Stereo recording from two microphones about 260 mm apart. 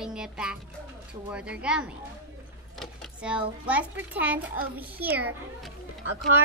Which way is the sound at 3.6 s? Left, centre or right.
Centre.